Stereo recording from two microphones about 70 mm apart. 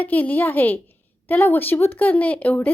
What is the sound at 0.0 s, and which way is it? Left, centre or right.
A woman's voice, left.